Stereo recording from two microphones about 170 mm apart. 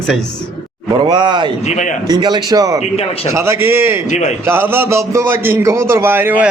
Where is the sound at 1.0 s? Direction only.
25° right (ahead or behind).